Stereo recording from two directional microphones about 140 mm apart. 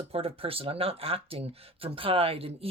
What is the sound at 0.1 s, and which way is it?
Speech, 45° right (ahead or behind).